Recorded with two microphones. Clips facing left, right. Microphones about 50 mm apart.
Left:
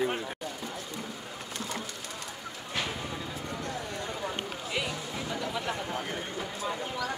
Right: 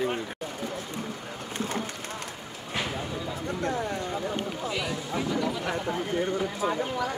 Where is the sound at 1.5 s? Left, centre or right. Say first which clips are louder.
Right 6 dB; right.